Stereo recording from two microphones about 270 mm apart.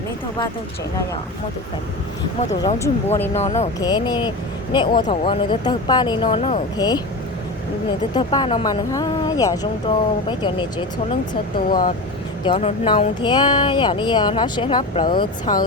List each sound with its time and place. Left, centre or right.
2.6 s speech: centre
3.3 s speech: left
8.1 s speech: centre
11.7 s speech: left
12.5 s speech: left